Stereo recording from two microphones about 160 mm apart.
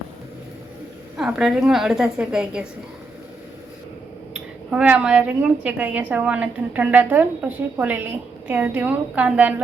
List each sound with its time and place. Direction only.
1.1 s a woman's voice: 5° right (ahead or behind)
4.7 s a woman's voice: 10° right (ahead or behind)